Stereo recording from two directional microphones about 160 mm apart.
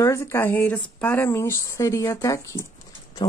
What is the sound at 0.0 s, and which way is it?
Speech, 15° left (ahead or behind).